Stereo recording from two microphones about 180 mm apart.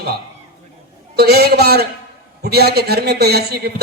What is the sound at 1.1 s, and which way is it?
A man's voice, 65° right (ahead or behind).